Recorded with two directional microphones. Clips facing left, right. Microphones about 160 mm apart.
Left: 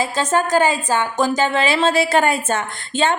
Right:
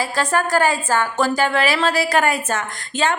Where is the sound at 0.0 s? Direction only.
20° left (ahead or behind).